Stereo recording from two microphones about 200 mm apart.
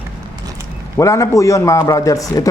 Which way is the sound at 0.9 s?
15° left (ahead or behind).